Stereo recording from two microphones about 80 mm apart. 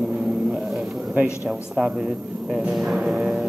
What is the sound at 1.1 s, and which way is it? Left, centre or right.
Speech, centre.